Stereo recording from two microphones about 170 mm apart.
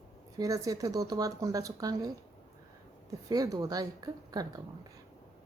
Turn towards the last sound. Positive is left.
turn(degrees=-20)  # may be behind; listen again after turning